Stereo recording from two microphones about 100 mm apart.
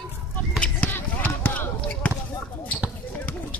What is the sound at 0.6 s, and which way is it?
Basketball bounce, 15° left (ahead or behind).